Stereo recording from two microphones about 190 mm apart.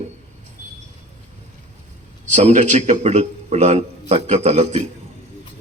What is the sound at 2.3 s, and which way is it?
A man's voice, 40° right (ahead or behind).